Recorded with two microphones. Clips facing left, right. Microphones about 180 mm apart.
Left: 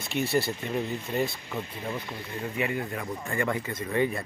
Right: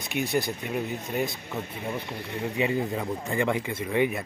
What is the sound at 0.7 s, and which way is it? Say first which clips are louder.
Speech: even; 5° right (ahead or behind).